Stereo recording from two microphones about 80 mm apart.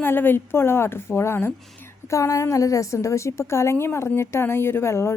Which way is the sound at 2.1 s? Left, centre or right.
Left.